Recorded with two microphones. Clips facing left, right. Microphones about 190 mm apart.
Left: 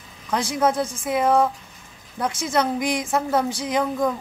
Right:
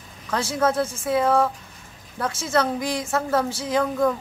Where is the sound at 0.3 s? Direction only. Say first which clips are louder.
Left 1 dB; 15° left (ahead or behind).